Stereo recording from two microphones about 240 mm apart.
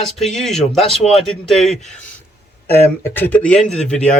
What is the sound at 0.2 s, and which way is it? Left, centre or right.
Speech, centre.